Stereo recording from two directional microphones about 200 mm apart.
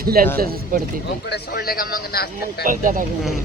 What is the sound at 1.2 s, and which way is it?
A man's voice, 55° left (ahead or behind).